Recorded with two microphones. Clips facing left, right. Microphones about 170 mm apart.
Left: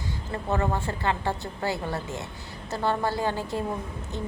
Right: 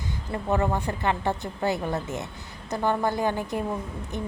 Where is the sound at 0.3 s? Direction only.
15° right (ahead or behind).